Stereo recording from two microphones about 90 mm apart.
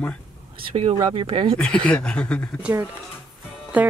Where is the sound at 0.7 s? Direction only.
90° right; by 1.5 s 75° right (ahead or behind).